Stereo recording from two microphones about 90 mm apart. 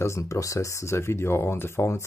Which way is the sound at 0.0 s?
35° left (ahead or behind).